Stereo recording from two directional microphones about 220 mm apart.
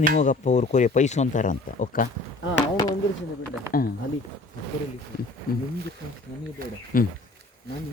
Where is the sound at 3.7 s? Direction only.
40° left (ahead or behind).